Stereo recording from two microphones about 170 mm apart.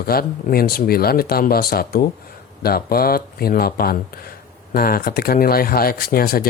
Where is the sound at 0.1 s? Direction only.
60° left (ahead or behind).